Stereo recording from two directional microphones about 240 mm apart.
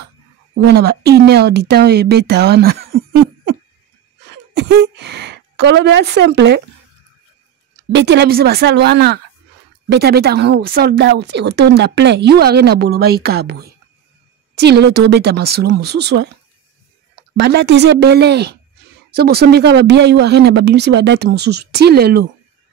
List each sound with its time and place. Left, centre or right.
0.6 s a woman's voice: right
7.9 s speech: right